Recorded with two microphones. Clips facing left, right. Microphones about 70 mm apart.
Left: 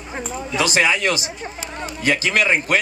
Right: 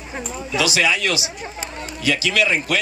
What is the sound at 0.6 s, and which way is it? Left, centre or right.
A man's voice, left.